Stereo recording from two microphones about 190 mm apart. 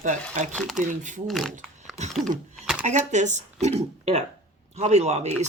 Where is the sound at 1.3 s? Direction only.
5° left (ahead or behind).